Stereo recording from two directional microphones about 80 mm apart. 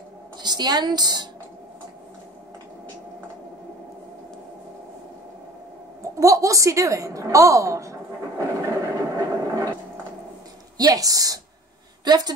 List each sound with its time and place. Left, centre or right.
0.4 s a woman's voice: right
6.1 s a sound: right
10.8 s a woman's voice: right
12.0 s a woman's voice: right